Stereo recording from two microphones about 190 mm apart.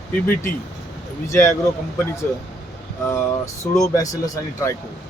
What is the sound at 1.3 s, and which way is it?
Speech, 15° left (ahead or behind).